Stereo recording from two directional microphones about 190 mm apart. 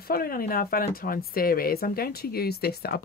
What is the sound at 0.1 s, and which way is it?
Speech, 50° left (ahead or behind).